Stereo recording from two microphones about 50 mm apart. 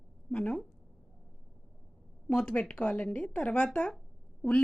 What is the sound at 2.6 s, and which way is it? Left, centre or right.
Speech, left.